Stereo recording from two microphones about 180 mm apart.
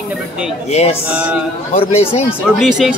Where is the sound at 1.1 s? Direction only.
5° right (ahead or behind).